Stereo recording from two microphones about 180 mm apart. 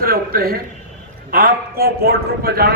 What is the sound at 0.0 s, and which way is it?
A man's voice, 55° right (ahead or behind).